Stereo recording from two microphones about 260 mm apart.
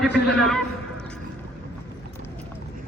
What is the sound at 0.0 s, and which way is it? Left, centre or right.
Speech, centre.